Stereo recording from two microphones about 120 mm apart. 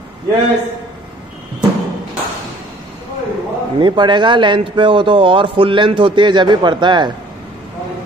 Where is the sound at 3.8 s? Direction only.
40° right (ahead or behind).